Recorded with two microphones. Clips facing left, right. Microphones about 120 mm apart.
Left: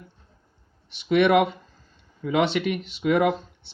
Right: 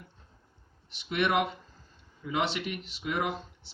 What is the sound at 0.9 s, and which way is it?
Speech, 80° left.